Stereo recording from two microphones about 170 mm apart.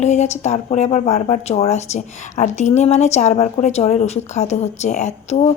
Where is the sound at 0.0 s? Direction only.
40° left (ahead or behind).